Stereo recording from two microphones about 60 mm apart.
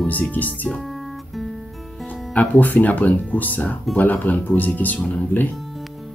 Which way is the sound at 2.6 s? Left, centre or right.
Left.